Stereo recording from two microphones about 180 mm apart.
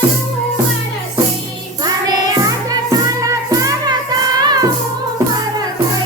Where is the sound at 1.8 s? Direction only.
20° right (ahead or behind).